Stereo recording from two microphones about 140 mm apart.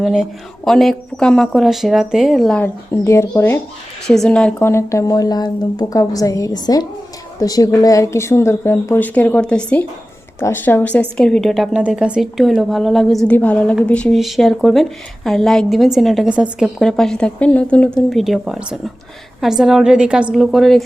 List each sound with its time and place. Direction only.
0.0 s a woman's voice: 5° right (ahead or behind)
2.9 s speech: 20° left (ahead or behind)
4.0 s a woman's voice: 5° left (ahead or behind)
4.6 s a woman's voice: 20° left (ahead or behind); by 20.8 s centre (ahead or behind)